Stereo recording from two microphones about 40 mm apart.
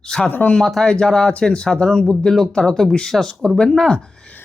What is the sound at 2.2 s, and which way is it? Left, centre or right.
Speech, centre.